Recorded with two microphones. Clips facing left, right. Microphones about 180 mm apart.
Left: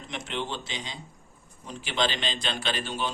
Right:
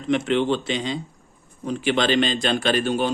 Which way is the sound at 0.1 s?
60° right (ahead or behind).